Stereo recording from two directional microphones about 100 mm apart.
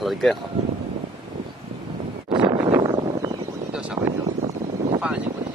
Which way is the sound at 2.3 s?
60° right (ahead or behind).